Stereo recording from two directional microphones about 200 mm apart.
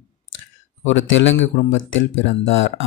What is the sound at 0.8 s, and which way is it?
Speech, 70° left (ahead or behind).